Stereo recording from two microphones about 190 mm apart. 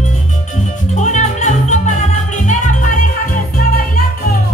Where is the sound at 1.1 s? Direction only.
40° left (ahead or behind).